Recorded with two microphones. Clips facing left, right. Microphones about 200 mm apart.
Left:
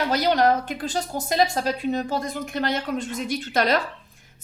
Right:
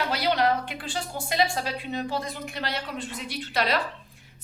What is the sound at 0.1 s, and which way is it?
A woman's voice, 45° left (ahead or behind).